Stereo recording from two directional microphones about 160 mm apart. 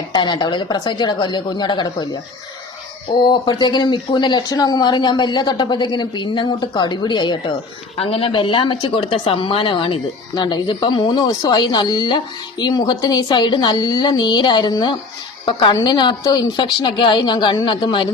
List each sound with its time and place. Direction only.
0.1 s speech: 30° left (ahead or behind)
3.2 s speech: 25° left (ahead or behind)